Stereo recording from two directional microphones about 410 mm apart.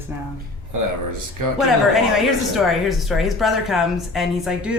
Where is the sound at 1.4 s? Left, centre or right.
Right.